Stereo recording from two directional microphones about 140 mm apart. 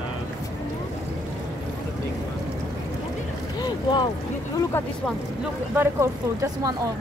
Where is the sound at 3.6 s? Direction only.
35° left (ahead or behind).